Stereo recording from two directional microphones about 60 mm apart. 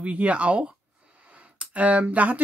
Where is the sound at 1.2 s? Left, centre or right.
Centre.